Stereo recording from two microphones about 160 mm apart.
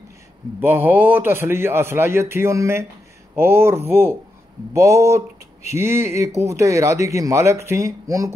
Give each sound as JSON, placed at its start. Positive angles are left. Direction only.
{"t": 0.6, "sound": "a man's voice", "side_deg": -15}